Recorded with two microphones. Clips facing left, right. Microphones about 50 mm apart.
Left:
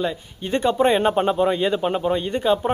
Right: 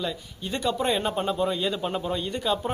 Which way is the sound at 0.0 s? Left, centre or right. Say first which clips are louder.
Left 6 dB; left.